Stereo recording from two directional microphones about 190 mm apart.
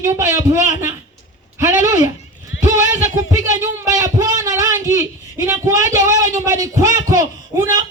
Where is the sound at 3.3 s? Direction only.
15° right (ahead or behind).